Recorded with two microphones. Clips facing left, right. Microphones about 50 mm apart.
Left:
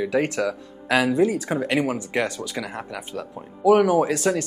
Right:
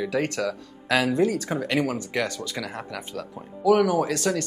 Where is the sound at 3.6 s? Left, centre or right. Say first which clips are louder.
Left 3 dB; left.